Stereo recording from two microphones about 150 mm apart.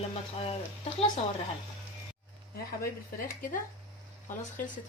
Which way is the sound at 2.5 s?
75° left (ahead or behind).